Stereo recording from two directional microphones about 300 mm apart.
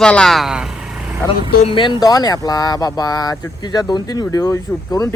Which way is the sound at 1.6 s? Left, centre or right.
Centre.